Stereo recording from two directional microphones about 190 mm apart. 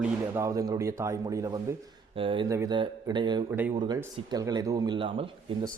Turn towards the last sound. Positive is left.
turn(degrees=-25)  # may be behind; listen again after turning